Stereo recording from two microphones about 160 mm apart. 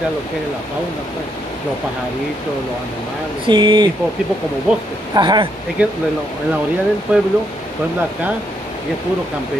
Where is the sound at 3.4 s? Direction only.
30° right (ahead or behind).